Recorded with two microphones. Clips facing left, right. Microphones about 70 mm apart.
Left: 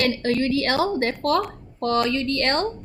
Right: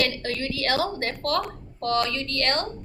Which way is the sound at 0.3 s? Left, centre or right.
Left.